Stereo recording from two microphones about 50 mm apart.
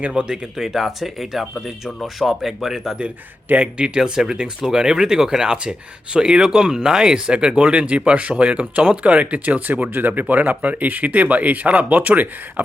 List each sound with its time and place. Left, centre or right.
0.0 s speech: centre
3.5 s speech: right